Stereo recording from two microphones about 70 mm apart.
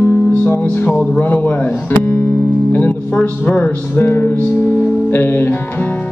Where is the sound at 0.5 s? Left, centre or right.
Left.